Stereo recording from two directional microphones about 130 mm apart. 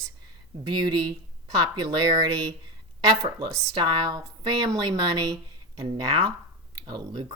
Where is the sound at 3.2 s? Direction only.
35° right (ahead or behind).